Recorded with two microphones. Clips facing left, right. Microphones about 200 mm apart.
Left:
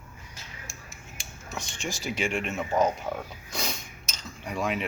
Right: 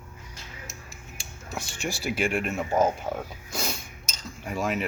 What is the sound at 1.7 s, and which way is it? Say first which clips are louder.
Speech: right 3 dB; 60° right (ahead or behind).